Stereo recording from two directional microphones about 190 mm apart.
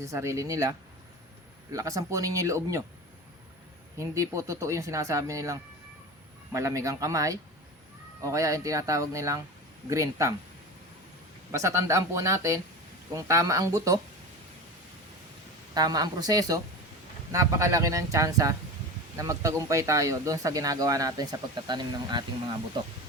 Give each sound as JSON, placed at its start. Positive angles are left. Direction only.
{"t": 0.0, "sound": "speech", "side_deg": -15}
{"t": 3.9, "sound": "speech", "side_deg": -15}
{"t": 11.5, "sound": "speech", "side_deg": -15}
{"t": 15.7, "sound": "speech", "side_deg": -20}